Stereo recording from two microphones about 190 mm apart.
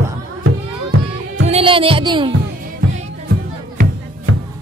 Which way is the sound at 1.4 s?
30° right (ahead or behind).